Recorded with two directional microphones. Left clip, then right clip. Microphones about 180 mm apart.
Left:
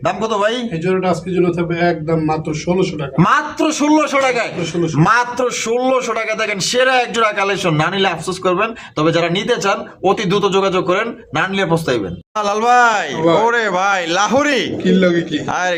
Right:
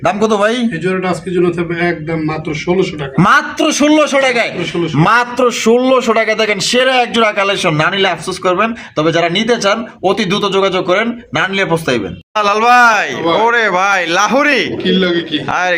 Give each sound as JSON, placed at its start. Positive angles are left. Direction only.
{"t": 0.0, "sound": "a man's voice", "side_deg": -20}
{"t": 1.7, "sound": "a man's voice", "side_deg": 30}
{"t": 3.2, "sound": "a man's voice", "side_deg": -20}
{"t": 12.4, "sound": "speech", "side_deg": 5}
{"t": 14.8, "sound": "a man's voice", "side_deg": 55}
{"t": 15.4, "sound": "speech", "side_deg": 0}